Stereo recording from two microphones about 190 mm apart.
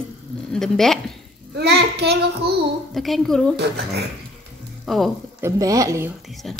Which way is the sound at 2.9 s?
Centre (ahead or behind).